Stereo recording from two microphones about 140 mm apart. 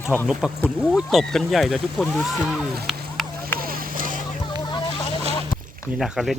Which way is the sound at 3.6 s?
85° right.